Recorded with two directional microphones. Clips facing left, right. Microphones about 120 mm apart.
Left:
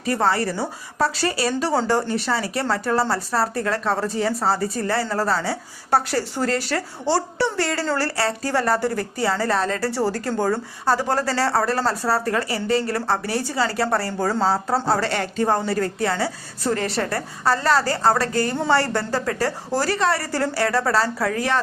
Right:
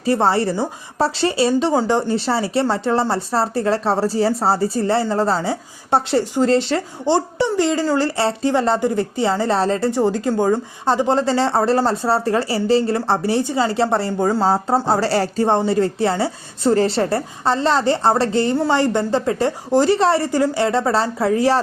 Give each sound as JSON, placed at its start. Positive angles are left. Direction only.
{"t": 0.0, "sound": "speech", "side_deg": -30}